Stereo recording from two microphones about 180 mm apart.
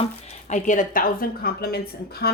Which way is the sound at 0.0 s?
40° left (ahead or behind).